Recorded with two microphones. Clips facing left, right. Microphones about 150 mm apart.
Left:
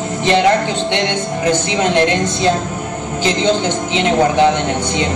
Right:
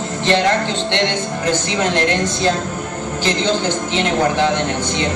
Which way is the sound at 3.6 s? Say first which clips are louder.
Left 2 dB; 15° left (ahead or behind).